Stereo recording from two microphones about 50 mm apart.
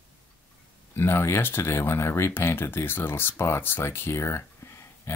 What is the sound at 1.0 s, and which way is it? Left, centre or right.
Speech, left.